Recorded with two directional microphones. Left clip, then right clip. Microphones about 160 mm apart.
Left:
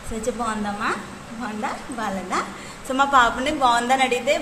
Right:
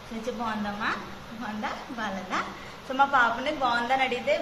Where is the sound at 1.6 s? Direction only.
60° left (ahead or behind).